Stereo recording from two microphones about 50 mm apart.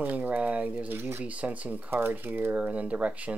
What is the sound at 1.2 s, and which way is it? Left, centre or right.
Speech, right.